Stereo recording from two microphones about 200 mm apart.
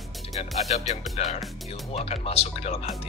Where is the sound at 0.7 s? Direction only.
35° left (ahead or behind).